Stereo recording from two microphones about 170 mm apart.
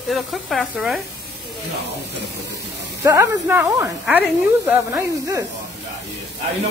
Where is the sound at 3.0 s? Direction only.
15° right (ahead or behind).